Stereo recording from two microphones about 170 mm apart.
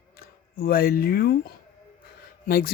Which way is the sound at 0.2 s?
60° left (ahead or behind).